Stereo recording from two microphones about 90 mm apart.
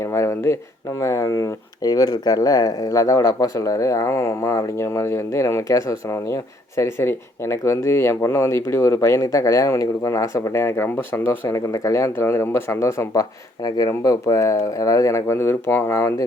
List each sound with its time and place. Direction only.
0.0 s speech: 30° left (ahead or behind)
11.4 s speech: 35° left (ahead or behind)